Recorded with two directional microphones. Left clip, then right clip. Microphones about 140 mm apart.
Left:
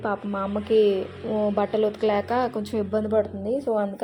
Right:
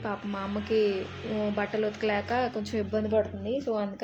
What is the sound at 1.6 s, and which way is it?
A woman's voice, 30° left (ahead or behind).